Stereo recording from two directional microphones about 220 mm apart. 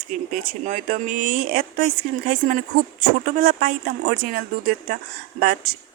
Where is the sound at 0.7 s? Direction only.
35° right (ahead or behind).